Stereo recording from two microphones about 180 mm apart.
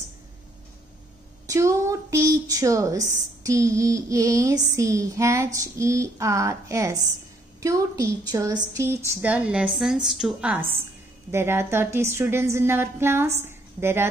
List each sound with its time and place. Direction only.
1.5 s speech: 15° right (ahead or behind)